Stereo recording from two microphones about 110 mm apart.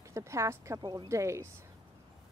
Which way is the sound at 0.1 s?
25° right (ahead or behind).